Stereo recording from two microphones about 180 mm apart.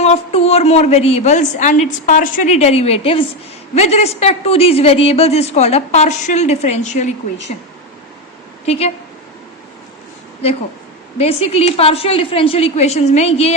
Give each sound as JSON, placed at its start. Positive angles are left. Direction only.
{"t": 0.0, "sound": "a woman's voice", "side_deg": 35}
{"t": 8.6, "sound": "speech", "side_deg": 35}
{"t": 11.2, "sound": "a woman's voice", "side_deg": 35}